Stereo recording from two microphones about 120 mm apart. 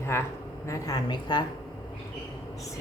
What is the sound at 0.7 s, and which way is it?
Speech, 30° left (ahead or behind).